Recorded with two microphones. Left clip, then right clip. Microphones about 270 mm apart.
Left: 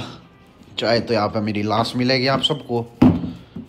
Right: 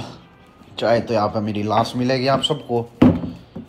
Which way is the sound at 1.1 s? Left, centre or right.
Centre.